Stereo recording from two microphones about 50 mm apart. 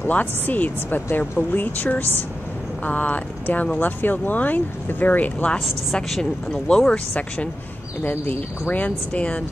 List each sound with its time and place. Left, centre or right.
0.0 s speech: left
6.0 s speech: centre
6.7 s speech: centre
8.0 s speech: left